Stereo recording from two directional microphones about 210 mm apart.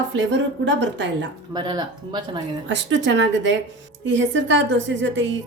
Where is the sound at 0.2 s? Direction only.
60° right (ahead or behind).